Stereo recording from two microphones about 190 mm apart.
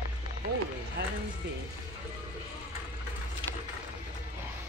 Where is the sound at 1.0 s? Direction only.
55° right (ahead or behind).